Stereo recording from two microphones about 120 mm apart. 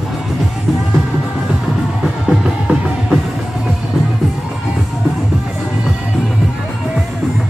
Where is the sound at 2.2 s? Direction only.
5° right (ahead or behind).